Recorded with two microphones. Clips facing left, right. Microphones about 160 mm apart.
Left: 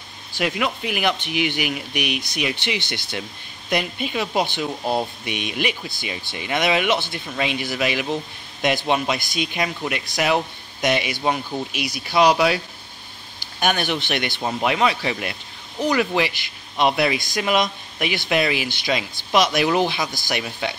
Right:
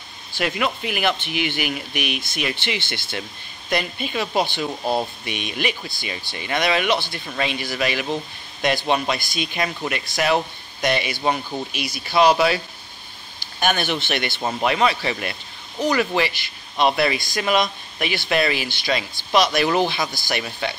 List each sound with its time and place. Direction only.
0.4 s speech: 5° left (ahead or behind)
5.3 s speech: 15° left (ahead or behind)
9.3 s speech: 15° left (ahead or behind)
9.6 s speech: 5° left (ahead or behind)
11.8 s speech: 15° left (ahead or behind)
13.6 s speech: 10° left (ahead or behind)
14.4 s speech: centre (ahead or behind)
16.2 s speech: 10° left (ahead or behind)